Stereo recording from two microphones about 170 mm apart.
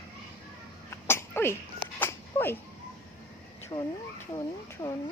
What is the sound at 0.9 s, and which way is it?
Sneeze, 15° left (ahead or behind).